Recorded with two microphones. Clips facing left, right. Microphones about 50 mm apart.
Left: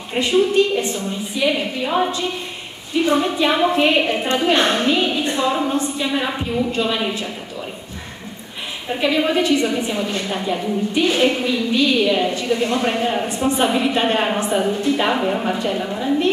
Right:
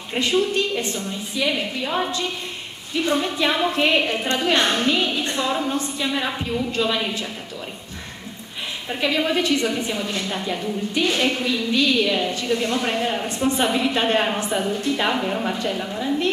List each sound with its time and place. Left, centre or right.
0.2 s a woman's voice: left
0.9 s a woman's voice: centre
9.0 s a woman's voice: centre